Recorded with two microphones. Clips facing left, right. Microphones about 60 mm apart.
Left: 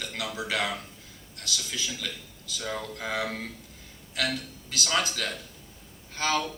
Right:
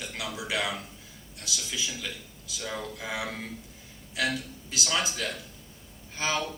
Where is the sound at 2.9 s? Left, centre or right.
Left.